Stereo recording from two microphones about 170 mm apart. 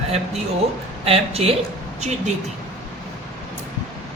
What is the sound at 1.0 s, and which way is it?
A man's voice, 35° right (ahead or behind).